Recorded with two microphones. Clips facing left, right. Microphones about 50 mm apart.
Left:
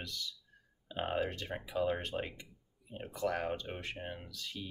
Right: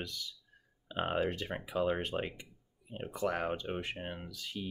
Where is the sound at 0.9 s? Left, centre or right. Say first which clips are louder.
Right 2 dB; centre.